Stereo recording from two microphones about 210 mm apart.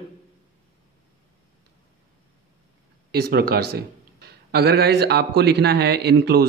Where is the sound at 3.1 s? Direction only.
50° right (ahead or behind).